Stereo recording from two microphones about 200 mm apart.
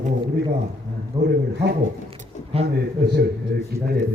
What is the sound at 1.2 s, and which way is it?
Speech, 55° right (ahead or behind).